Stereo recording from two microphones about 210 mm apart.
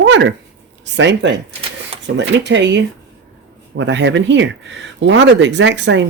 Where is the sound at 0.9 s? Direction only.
60° right (ahead or behind).